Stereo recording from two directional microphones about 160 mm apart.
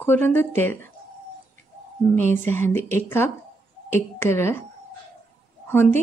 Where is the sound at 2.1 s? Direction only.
15° left (ahead or behind).